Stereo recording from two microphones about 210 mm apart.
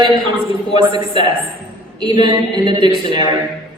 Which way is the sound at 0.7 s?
25° right (ahead or behind).